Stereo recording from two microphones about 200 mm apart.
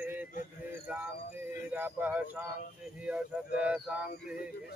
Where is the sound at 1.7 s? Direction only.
10° right (ahead or behind).